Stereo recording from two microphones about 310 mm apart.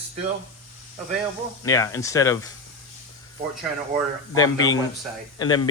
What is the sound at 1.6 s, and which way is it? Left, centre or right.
Speech, centre.